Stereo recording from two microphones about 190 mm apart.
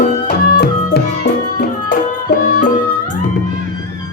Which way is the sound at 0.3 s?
55° left (ahead or behind).